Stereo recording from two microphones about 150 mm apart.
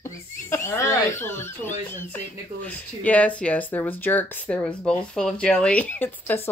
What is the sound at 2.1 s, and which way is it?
Speech, 10° left (ahead or behind).